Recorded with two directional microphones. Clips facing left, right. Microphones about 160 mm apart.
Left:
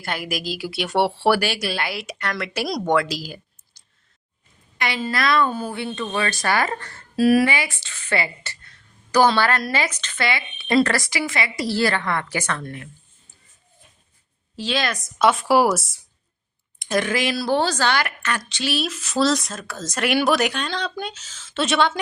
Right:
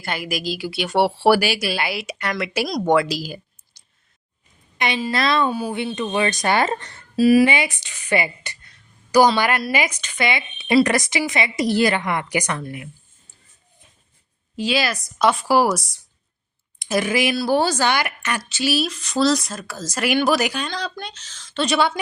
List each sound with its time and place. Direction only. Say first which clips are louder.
0.0 s speech: right 1 dB; centre (ahead or behind)
4.8 s a woman's voice: right 2 dB; 20° right (ahead or behind)
5.5 s a woman's voice: right 3 dB; 10° right (ahead or behind)
7.2 s a woman's voice: right 2 dB; centre (ahead or behind)
7.4 s speech: right 3 dB; 20° right (ahead or behind)
14.6 s a woman's voice: right 3 dB; 10° right (ahead or behind)